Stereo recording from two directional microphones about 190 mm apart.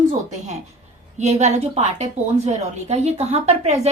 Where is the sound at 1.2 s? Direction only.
40° right (ahead or behind).